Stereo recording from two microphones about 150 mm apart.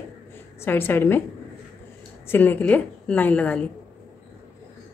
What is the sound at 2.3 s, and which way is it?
A woman's voice, 10° left (ahead or behind).